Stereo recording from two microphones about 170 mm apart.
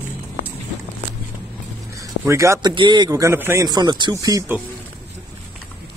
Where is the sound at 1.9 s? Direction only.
15° right (ahead or behind).